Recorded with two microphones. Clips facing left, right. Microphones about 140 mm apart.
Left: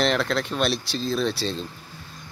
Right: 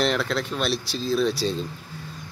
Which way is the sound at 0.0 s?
5° right (ahead or behind).